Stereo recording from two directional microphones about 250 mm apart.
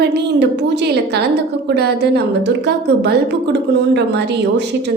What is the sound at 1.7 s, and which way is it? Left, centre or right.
A woman's voice, right.